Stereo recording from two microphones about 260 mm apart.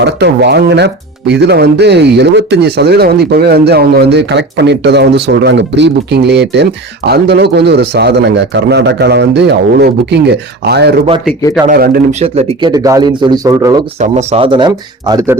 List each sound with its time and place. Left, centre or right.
0.0 s speech: right
12.2 s speech: right
14.0 s speech: right